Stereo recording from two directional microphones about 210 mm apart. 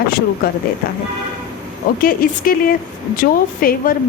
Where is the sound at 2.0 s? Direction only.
45° left (ahead or behind).